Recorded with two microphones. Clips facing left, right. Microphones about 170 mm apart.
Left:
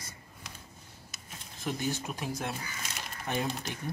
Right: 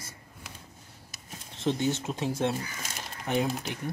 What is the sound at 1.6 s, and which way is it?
Speech, 25° right (ahead or behind).